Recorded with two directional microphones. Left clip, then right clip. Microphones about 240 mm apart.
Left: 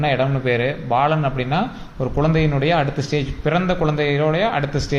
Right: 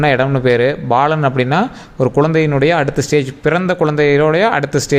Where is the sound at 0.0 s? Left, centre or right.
Right.